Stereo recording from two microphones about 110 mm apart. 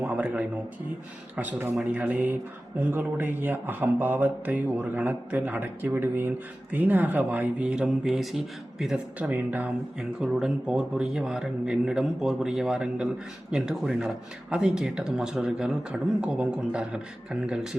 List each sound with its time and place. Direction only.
0.0 s a sound: 15° right (ahead or behind)
1.4 s speech: 15° right (ahead or behind); by 8.4 s centre (ahead or behind)
9.1 s speech: 15° right (ahead or behind)